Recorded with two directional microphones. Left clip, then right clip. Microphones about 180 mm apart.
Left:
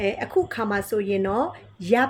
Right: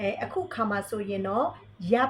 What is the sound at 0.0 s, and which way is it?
Speech, 45° left (ahead or behind).